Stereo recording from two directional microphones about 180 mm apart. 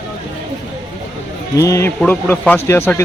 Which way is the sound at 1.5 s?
15° left (ahead or behind).